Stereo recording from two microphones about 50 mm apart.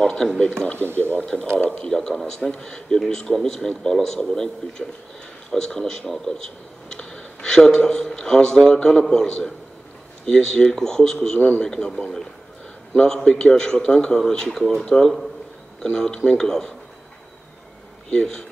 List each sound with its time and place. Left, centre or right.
0.0 s a man's voice: centre
2.0 s a man's voice: centre
6.9 s a sound: centre
7.4 s a man's voice: centre
11.3 s speech: left
11.6 s a man's voice: centre
14.9 s a man's voice: centre
18.1 s a man's voice: centre